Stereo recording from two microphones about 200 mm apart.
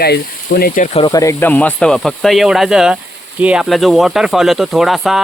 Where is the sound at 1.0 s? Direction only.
20° left (ahead or behind); by 5.2 s centre (ahead or behind).